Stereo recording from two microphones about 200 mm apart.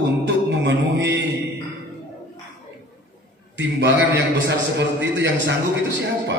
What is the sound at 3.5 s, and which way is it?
A man's voice, 60° right (ahead or behind).